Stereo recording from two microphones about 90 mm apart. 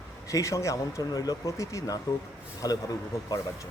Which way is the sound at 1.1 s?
45° left (ahead or behind).